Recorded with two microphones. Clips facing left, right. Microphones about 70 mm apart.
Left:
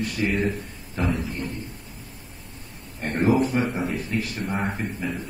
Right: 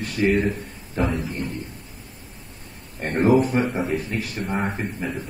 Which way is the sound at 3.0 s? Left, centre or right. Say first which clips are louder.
Right 2 dB; right.